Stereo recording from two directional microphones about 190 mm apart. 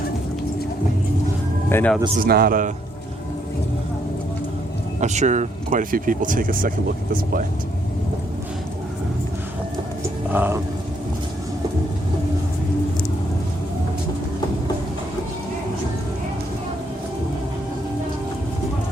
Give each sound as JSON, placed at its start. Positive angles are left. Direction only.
{"t": 1.7, "sound": "speech", "side_deg": 10}
{"t": 2.2, "sound": "speech", "side_deg": -50}
{"t": 4.9, "sound": "speech", "side_deg": -40}
{"t": 10.3, "sound": "speech", "side_deg": -10}